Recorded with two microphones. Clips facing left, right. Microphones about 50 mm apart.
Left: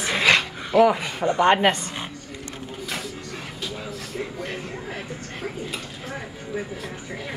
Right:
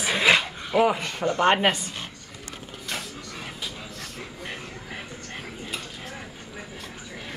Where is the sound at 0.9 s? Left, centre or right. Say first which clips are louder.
Left 2 dB; centre.